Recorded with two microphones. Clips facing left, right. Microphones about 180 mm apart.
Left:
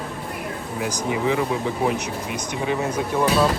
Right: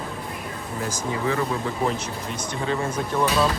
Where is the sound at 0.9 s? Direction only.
15° left (ahead or behind).